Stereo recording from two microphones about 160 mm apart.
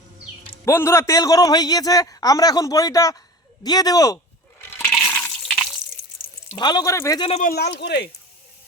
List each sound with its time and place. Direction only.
0.6 s a man's voice: 15° left (ahead or behind)
4.7 s toilet flush: 15° left (ahead or behind)
6.5 s a man's voice: 25° left (ahead or behind)
7.2 s speech: 35° left (ahead or behind)
7.4 s speech: 90° left